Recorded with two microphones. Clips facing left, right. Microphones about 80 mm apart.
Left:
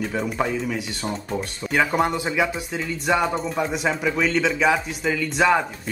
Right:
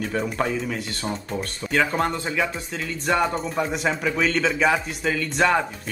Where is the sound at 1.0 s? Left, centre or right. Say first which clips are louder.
Left 1 dB; centre.